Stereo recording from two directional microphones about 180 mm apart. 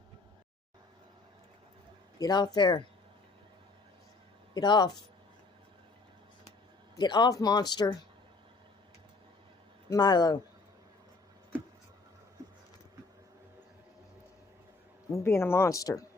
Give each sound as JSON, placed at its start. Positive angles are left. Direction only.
{"t": 2.1, "sound": "speech", "side_deg": 20}
{"t": 4.5, "sound": "speech", "side_deg": 25}
{"t": 6.9, "sound": "speech", "side_deg": 25}
{"t": 9.9, "sound": "speech", "side_deg": 25}
{"t": 15.1, "sound": "speech", "side_deg": 15}